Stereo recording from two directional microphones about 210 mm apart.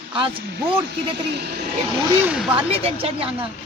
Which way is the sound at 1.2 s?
50° right (ahead or behind).